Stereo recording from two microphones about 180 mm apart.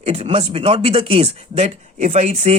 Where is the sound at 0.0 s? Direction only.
35° right (ahead or behind).